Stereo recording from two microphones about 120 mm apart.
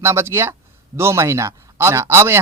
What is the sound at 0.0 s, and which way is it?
Speech, 20° right (ahead or behind).